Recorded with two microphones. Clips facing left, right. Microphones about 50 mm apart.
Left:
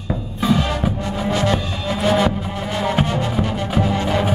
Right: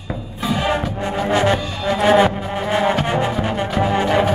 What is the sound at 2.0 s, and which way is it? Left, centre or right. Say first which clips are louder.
Music: right 4 dB; right.